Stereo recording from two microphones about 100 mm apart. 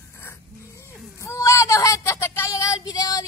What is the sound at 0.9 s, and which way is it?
Speech, 30° left (ahead or behind).